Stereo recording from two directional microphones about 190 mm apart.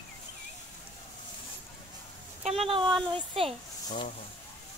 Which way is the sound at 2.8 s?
Centre (ahead or behind).